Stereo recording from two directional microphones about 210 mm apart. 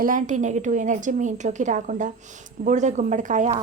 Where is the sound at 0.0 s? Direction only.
40° right (ahead or behind).